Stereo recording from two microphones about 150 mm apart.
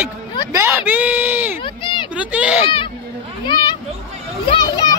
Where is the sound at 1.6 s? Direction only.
30° left (ahead or behind).